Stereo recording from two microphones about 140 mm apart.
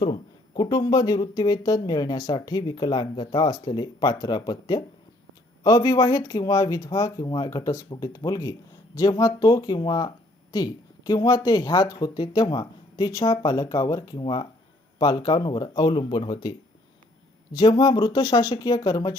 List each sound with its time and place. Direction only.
0.0 s speech: 30° left (ahead or behind)